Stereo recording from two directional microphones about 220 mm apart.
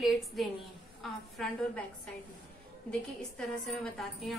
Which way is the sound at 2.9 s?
5° left (ahead or behind).